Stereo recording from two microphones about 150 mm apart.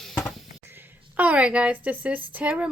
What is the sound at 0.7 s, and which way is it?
A woman's voice, 10° right (ahead or behind).